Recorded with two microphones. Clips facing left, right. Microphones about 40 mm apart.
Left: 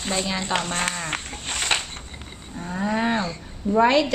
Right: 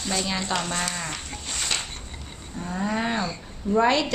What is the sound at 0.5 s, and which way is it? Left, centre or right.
Speech, left.